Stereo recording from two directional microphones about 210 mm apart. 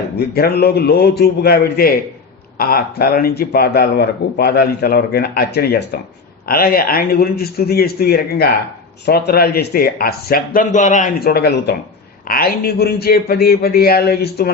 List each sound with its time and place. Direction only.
0.2 s speech: 50° left (ahead or behind)